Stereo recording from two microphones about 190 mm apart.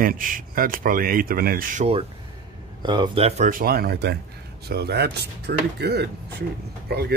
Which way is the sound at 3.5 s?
50° right (ahead or behind).